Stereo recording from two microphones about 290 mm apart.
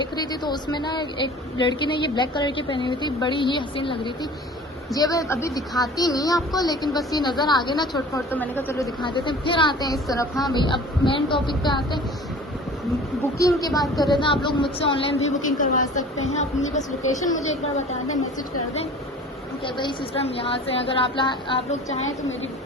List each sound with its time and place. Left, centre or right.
0.2 s a woman's voice: centre
13.4 s a woman's voice: centre
13.8 s a woman's voice: centre
14.1 s a woman's voice: centre
19.6 s a woman's voice: centre